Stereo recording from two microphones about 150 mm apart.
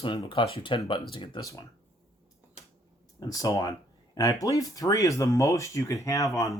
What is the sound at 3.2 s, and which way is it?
Speech, 25° left (ahead or behind).